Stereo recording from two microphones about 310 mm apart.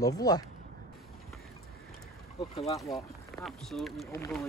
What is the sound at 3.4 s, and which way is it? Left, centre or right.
Speech, centre.